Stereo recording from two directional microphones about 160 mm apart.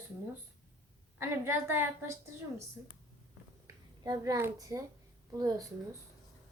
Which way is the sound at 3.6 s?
20° right (ahead or behind).